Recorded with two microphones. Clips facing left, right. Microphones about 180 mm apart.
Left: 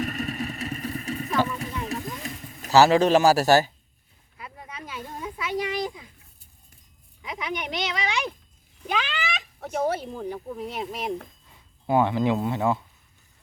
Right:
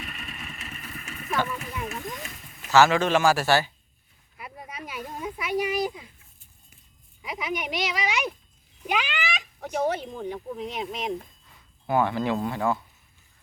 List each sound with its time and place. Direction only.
0.0 s vehicle: 40° left (ahead or behind)
1.4 s clip-clop: 35° left (ahead or behind)
1.8 s a sound: 35° left (ahead or behind)
4.4 s a sound: 20° right (ahead or behind)
7.3 s speech: 5° right (ahead or behind)
9.0 s speech: centre (ahead or behind)
11.9 s speech: 20° left (ahead or behind)